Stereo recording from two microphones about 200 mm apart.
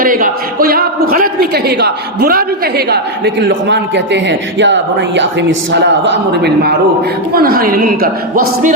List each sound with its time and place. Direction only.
0.0 s a man's voice: 45° right (ahead or behind)